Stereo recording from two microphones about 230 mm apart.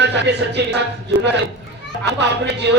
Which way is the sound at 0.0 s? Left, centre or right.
Right.